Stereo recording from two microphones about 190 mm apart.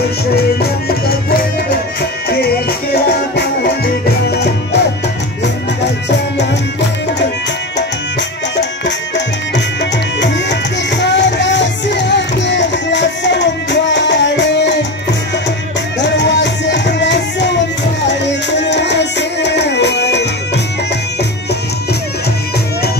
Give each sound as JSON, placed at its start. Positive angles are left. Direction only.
{"t": 0.4, "sound": "music", "side_deg": 55}
{"t": 6.0, "sound": "music", "side_deg": 65}
{"t": 7.7, "sound": "music", "side_deg": 65}
{"t": 16.0, "sound": "music", "side_deg": 65}